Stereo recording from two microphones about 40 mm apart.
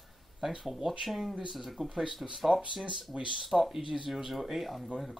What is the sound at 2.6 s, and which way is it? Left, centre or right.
Speech, right.